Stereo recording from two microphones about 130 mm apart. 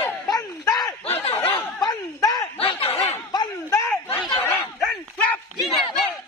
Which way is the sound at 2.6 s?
50° left (ahead or behind).